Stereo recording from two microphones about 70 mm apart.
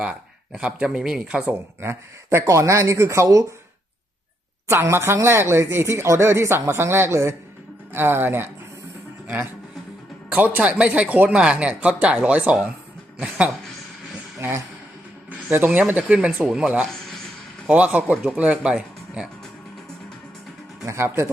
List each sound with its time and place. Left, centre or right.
0.5 s speech: centre
1.8 s speech: right
4.7 s speech: right; by 13.5 s centre
15.5 s a man's voice: right; by 19.3 s centre
20.8 s speech: right